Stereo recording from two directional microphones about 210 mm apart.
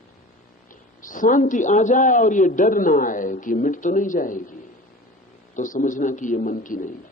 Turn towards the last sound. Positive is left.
turn(degrees=40)  # may be behind; listen again after turning